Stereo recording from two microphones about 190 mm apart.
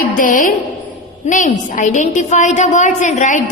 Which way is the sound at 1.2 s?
40° left (ahead or behind).